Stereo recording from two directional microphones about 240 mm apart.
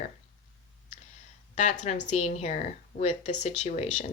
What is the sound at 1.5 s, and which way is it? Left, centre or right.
A woman's voice, left.